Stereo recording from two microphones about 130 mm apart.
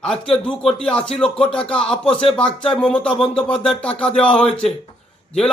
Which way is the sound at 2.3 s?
40° left (ahead or behind).